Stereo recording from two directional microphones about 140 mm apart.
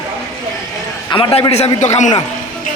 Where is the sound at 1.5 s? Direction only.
55° left (ahead or behind).